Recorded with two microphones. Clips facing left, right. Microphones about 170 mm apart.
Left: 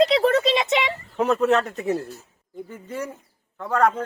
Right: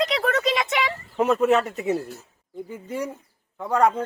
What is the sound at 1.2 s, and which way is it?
A man's voice, centre (ahead or behind).